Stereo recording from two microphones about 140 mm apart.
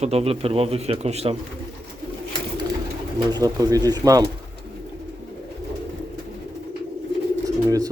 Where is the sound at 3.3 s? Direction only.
25° right (ahead or behind).